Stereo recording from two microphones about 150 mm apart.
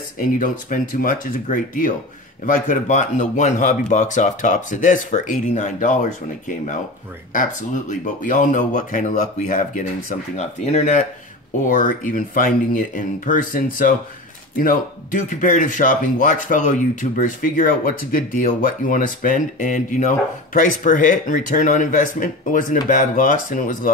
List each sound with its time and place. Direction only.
0.4 s speech: 65° left (ahead or behind)
11.6 s speech: 60° left (ahead or behind)